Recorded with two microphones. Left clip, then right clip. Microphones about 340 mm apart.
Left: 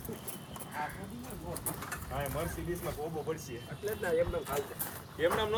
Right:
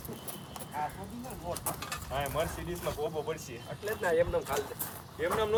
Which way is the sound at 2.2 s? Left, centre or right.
Centre.